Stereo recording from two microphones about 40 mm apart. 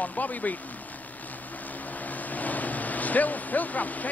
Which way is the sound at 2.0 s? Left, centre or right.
Left.